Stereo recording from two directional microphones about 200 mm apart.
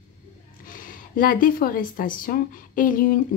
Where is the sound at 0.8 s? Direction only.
45° left (ahead or behind).